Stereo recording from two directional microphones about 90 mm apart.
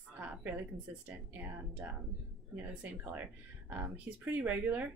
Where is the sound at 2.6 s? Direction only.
20° right (ahead or behind).